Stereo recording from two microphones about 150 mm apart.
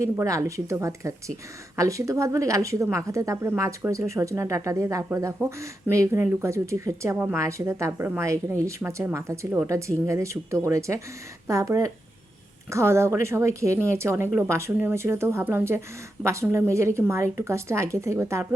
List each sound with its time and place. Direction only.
0.0 s a woman's voice: 20° right (ahead or behind)